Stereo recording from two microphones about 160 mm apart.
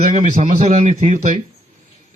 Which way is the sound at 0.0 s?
50° right (ahead or behind).